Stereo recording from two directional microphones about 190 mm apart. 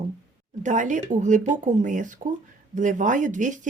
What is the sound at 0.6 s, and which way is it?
Speech, 40° right (ahead or behind).